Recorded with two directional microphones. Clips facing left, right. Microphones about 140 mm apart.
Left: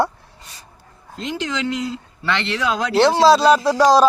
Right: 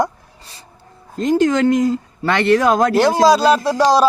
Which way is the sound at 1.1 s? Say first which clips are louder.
Right 11 dB; 45° right (ahead or behind).